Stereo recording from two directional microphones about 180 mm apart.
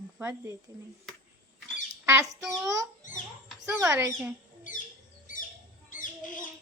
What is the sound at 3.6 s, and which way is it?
Speech, 15° right (ahead or behind).